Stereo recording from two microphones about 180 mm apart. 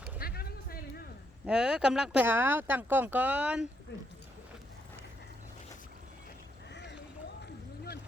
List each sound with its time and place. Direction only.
0.2 s music: 55° left (ahead or behind)
1.5 s speech: 5° right (ahead or behind)
6.7 s a sound: 75° left (ahead or behind)